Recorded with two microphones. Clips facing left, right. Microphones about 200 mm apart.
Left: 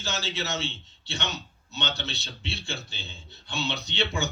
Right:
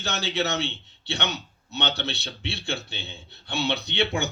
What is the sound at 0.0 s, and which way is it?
A man's voice, 60° right (ahead or behind).